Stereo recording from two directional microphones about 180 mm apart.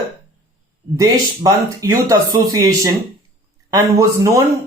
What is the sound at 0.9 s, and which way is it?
Speech, 20° right (ahead or behind).